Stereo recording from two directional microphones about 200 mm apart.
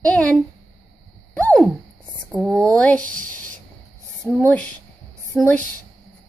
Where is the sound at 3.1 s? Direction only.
40° right (ahead or behind).